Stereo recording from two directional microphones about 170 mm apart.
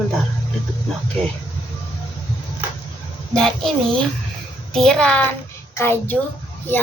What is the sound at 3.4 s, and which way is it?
Speech, centre (ahead or behind).